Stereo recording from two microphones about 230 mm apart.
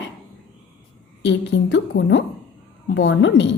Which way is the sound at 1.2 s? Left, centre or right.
Left.